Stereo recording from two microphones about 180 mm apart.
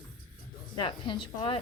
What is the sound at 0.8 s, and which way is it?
Speech, 25° left (ahead or behind).